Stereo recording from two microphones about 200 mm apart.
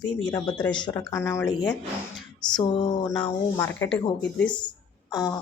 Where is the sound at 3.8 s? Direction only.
15° left (ahead or behind).